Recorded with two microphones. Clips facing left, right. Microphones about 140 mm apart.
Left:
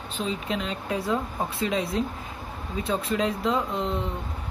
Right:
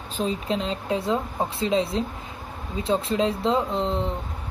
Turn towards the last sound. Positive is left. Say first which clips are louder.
# right 3 dB
turn(degrees=-30)  # may be behind; listen again after turning